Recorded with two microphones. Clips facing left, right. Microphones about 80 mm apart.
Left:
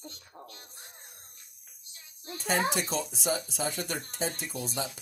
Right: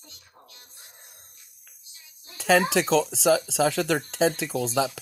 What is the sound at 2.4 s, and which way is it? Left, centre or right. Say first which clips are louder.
Speech: right 8 dB; right.